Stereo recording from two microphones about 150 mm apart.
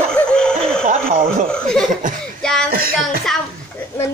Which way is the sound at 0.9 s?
60° right (ahead or behind).